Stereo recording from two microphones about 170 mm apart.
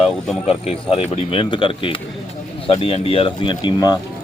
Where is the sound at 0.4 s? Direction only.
35° left (ahead or behind).